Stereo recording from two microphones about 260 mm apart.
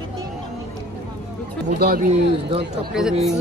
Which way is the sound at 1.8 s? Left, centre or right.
Right.